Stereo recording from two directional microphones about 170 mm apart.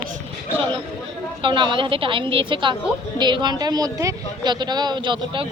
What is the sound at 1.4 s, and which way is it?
Speech, 30° right (ahead or behind).